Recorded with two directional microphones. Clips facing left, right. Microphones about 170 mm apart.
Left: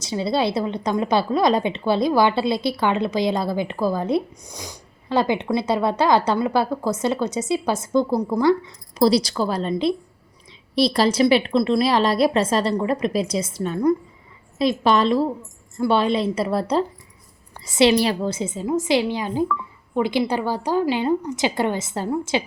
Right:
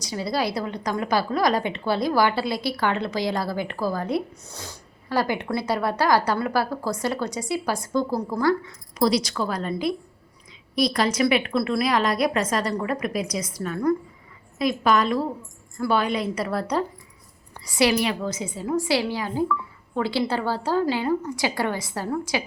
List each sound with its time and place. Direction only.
0.0 s a woman's voice: 25° left (ahead or behind)